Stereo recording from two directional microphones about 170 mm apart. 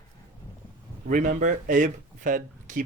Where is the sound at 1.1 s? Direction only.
50° right (ahead or behind).